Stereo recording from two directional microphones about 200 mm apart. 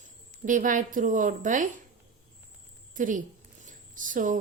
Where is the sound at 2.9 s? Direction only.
40° right (ahead or behind).